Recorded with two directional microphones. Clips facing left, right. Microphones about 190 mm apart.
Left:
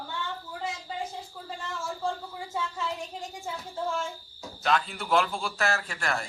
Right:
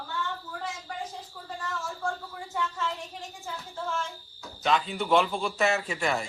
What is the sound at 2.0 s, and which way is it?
Speech, 15° left (ahead or behind).